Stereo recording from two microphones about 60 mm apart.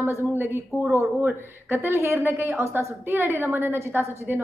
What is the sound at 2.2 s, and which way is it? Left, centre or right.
Speech, right.